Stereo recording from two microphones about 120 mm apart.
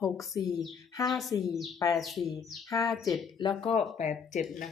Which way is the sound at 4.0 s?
75° left (ahead or behind).